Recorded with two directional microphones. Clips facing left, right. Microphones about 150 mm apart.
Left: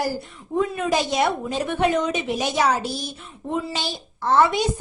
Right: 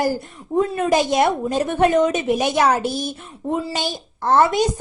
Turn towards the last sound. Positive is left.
turn(degrees=-45)  # may be behind; listen again after turning